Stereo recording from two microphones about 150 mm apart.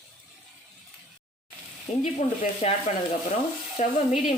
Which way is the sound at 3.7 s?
45° left (ahead or behind).